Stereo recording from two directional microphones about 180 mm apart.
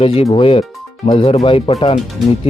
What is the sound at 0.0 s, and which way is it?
Speech, 30° left (ahead or behind).